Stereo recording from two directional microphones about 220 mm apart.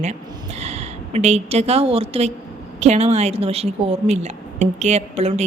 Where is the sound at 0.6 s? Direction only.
30° right (ahead or behind).